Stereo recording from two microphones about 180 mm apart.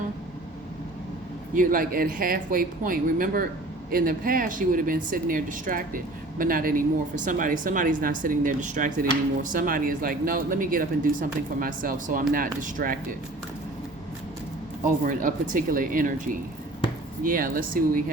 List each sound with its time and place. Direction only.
1.5 s speech: 50° right (ahead or behind)
15.0 s speech: 50° right (ahead or behind)
17.2 s speech: 50° right (ahead or behind)